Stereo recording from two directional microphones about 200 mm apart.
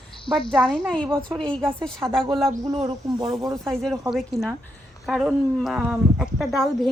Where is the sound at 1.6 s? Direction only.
10° right (ahead or behind).